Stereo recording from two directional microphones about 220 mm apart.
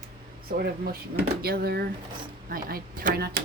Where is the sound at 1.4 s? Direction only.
45° right (ahead or behind).